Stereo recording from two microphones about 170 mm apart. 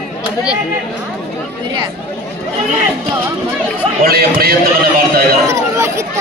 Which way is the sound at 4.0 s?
65° right (ahead or behind).